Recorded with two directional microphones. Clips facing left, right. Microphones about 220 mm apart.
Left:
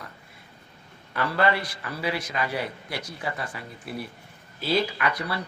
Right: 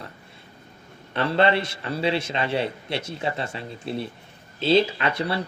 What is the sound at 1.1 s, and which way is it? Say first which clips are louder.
Speech: right 4 dB; 25° right (ahead or behind).